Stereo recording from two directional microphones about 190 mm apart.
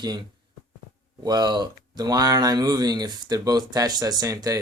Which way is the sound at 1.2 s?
20° right (ahead or behind).